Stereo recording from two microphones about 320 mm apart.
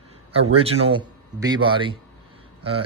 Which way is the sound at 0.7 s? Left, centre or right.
Centre.